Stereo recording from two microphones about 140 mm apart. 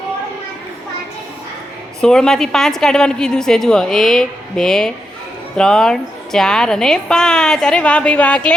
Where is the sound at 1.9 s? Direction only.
5° left (ahead or behind).